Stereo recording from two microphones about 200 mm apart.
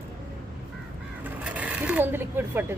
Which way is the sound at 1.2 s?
5° right (ahead or behind).